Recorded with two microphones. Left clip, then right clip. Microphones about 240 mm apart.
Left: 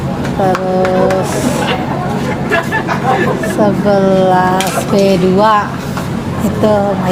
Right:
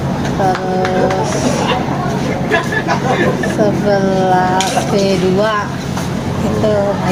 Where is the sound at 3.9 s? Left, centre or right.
Left.